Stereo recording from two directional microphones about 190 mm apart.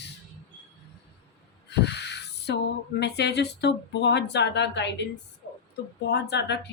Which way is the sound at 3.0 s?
60° left (ahead or behind).